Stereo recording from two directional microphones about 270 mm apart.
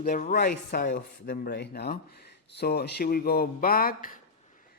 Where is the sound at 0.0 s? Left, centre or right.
Left.